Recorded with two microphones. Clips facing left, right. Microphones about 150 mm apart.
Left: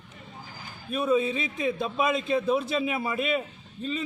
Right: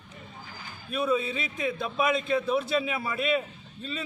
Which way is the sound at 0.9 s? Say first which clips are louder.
Left 3 dB; 35° left (ahead or behind).